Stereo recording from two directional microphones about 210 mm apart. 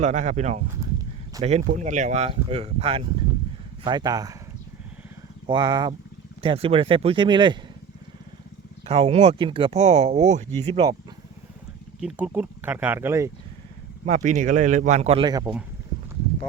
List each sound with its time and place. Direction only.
0.0 s speech: 35° right (ahead or behind); by 4.4 s 15° right (ahead or behind)
5.5 s speech: 20° right (ahead or behind)
8.9 s speech: 30° right (ahead or behind)
11.9 s speech: 5° right (ahead or behind)
14.0 s speech: 35° right (ahead or behind)